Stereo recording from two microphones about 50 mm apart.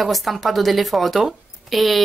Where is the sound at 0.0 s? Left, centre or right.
Centre.